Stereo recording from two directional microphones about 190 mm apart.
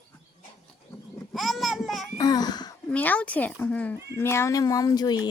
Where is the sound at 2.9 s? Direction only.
5° left (ahead or behind).